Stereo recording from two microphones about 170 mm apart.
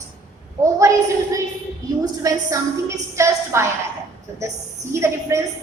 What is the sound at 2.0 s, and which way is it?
A woman's voice, 20° right (ahead or behind).